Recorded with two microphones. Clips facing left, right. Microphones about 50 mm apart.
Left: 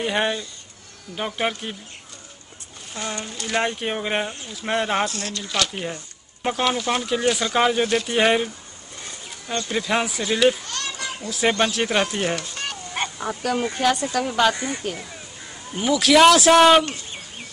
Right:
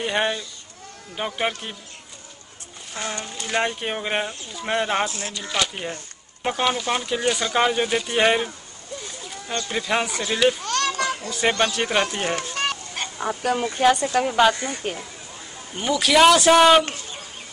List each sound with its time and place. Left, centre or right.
0.0 s speech: centre
2.9 s speech: centre
5.0 s speech: right
5.3 s speech: centre
9.7 s speech: centre
10.7 s children playing: right
11.2 s speech: centre
13.2 s speech: centre
15.7 s speech: centre